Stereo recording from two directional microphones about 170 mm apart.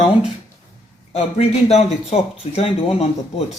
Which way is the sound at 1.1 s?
40° left (ahead or behind).